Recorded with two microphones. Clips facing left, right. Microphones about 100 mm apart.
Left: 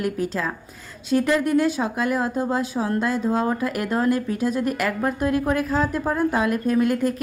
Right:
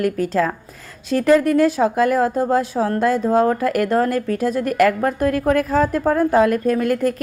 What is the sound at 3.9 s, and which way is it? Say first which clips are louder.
A woman's voice: right 3 dB; 45° right (ahead or behind).